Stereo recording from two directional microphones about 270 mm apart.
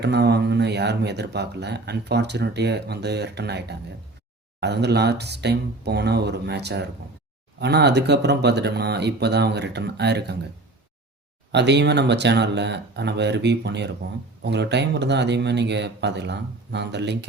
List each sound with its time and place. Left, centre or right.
0.0 s speech: right
11.5 s speech: right